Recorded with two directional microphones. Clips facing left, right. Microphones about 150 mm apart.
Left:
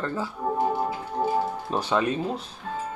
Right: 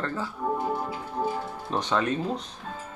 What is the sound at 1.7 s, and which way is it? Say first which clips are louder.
Speech: left 1 dB; 10° left (ahead or behind).